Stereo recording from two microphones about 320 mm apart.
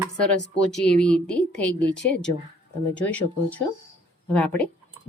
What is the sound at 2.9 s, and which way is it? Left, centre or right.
Speech, centre.